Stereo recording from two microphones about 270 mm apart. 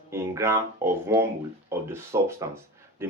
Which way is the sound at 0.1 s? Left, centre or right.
Centre.